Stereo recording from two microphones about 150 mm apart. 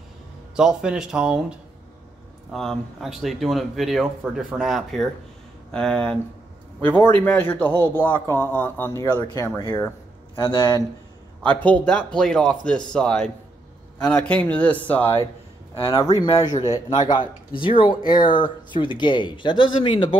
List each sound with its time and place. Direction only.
0.6 s a man's voice: 5° right (ahead or behind); by 9.5 s 20° left (ahead or behind)
10.3 s speech: 35° left (ahead or behind)
11.4 s a man's voice: 10° left (ahead or behind)
15.7 s speech: 30° left (ahead or behind)